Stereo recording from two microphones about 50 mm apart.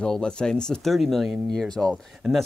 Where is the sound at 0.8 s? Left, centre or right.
Centre.